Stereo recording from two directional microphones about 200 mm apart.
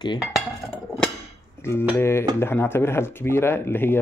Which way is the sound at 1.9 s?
10° left (ahead or behind).